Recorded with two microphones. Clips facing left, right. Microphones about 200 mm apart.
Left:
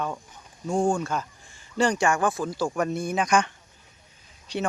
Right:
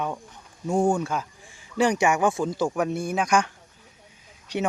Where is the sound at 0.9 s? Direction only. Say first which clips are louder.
Right 1 dB; 10° right (ahead or behind).